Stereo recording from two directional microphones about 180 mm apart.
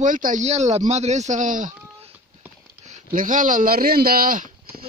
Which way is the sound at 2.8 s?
45° right (ahead or behind).